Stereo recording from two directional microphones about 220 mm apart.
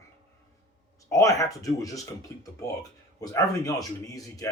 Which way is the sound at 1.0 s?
15° left (ahead or behind).